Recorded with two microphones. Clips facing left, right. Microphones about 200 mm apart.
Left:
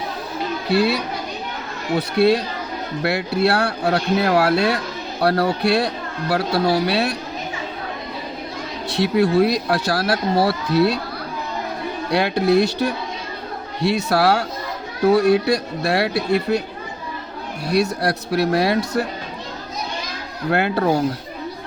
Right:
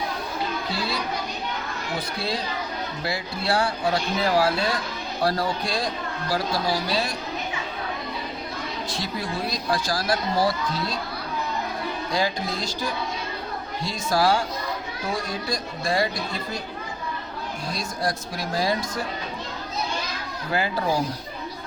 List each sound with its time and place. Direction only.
0.7 s speech: 65° left (ahead or behind)
8.9 s speech: 65° left (ahead or behind)
12.1 s speech: 65° left (ahead or behind)
17.7 s speech: 65° left (ahead or behind)
20.5 s speech: 65° left (ahead or behind)